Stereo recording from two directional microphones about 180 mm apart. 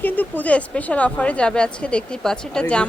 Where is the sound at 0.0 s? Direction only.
10° left (ahead or behind).